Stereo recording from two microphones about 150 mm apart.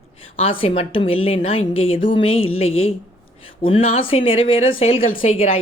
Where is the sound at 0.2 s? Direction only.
40° left (ahead or behind).